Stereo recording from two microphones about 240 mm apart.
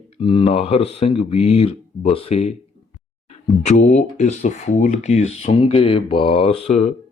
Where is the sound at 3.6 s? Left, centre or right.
Left.